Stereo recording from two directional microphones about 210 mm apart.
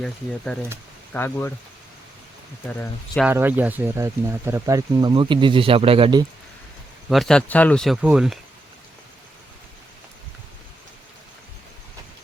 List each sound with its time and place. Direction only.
0.0 s speech: 5° left (ahead or behind)
2.6 s speech: 5° left (ahead or behind)
3.2 s speech: 10° right (ahead or behind)
7.1 s speech: centre (ahead or behind)